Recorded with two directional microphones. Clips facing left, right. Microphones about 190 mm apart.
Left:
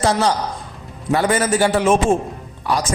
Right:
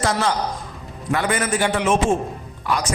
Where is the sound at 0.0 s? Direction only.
35° left (ahead or behind).